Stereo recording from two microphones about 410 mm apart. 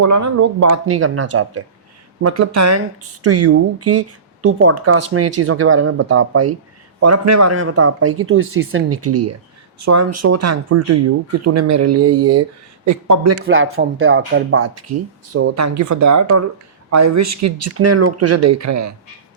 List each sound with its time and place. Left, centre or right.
0.0 s speech: right
13.4 s speech: right